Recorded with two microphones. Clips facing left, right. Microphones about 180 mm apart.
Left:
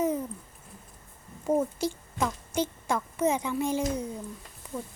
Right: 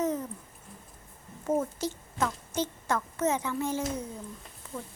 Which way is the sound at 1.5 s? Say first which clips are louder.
Left 3 dB; 10° left (ahead or behind).